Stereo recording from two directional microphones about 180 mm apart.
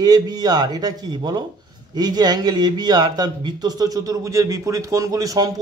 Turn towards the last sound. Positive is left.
turn(degrees=-20)  # may be behind; listen again after turning